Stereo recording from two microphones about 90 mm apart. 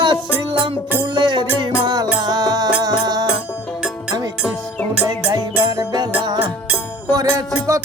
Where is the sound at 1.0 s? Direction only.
55° right (ahead or behind).